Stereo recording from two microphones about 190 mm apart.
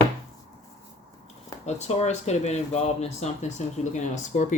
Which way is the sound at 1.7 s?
35° left (ahead or behind).